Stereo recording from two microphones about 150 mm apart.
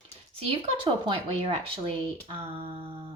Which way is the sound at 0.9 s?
35° right (ahead or behind).